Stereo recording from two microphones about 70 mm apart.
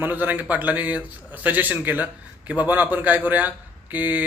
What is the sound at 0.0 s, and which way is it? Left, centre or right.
A man's voice, right.